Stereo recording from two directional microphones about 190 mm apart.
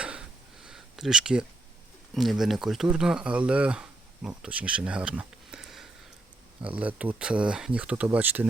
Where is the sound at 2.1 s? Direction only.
Centre (ahead or behind).